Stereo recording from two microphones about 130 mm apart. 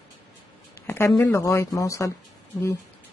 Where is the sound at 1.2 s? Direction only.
25° left (ahead or behind).